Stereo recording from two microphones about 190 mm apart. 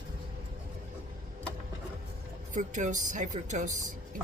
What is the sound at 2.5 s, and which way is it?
Speech, 40° right (ahead or behind).